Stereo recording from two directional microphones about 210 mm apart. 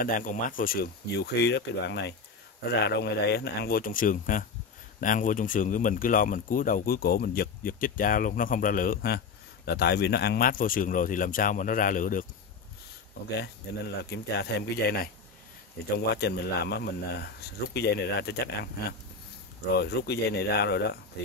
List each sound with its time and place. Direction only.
0.0 s speech: 40° left (ahead or behind)
14.1 s speech: 50° left (ahead or behind)
16.1 s speech: 50° left (ahead or behind)